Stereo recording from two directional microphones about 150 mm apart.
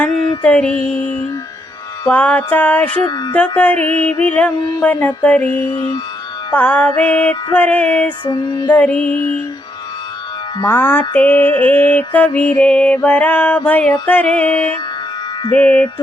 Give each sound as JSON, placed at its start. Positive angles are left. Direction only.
{"t": 0.4, "sound": "music", "side_deg": 10}
{"t": 3.0, "sound": "music", "side_deg": 30}
{"t": 3.3, "sound": "music", "side_deg": 10}
{"t": 5.7, "sound": "music", "side_deg": 30}
{"t": 6.5, "sound": "music", "side_deg": 10}
{"t": 8.2, "sound": "music", "side_deg": 30}
{"t": 8.7, "sound": "music", "side_deg": 10}
{"t": 10.7, "sound": "music", "side_deg": 15}